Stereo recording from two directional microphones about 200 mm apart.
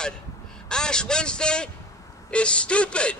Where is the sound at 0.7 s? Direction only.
5° left (ahead or behind).